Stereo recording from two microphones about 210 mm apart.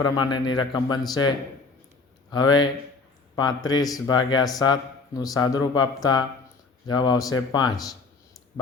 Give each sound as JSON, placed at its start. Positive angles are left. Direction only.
{"t": 0.0, "sound": "speech", "side_deg": 20}
{"t": 2.3, "sound": "speech", "side_deg": 20}